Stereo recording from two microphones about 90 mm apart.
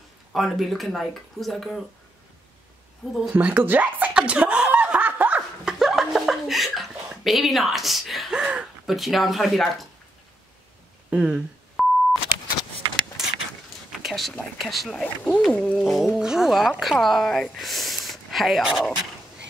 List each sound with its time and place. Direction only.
0.3 s speech: centre (ahead or behind)
3.3 s speech: 15° right (ahead or behind)
5.7 s a sound: 5° right (ahead or behind)
8.9 s speech: centre (ahead or behind)
11.1 s speech: 10° right (ahead or behind)
11.8 s beep: centre (ahead or behind)
13.2 s a sound: 5° right (ahead or behind)
14.0 s speech: centre (ahead or behind)
15.8 s speech: 5° right (ahead or behind)